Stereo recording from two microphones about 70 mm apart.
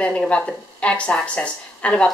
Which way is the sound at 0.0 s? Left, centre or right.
Centre.